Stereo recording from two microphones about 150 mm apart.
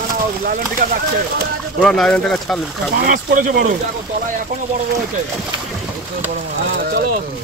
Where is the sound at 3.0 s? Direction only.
65° right (ahead or behind).